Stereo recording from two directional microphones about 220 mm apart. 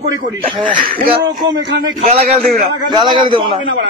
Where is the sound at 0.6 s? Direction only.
35° right (ahead or behind).